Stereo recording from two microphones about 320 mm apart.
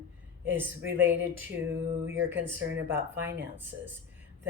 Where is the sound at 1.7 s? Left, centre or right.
Right.